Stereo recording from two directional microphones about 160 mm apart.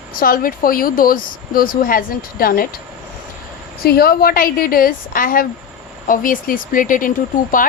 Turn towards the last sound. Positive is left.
turn(degrees=55)  # may be behind; listen again after turning